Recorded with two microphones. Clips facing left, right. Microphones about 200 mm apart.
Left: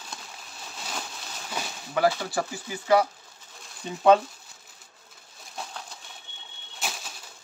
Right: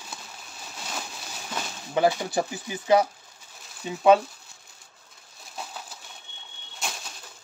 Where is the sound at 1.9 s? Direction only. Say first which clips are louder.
Right 2 dB; 20° right (ahead or behind).